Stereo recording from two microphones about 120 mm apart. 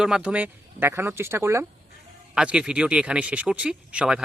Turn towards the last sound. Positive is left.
turn(degrees=-10)  # may be behind; listen again after turning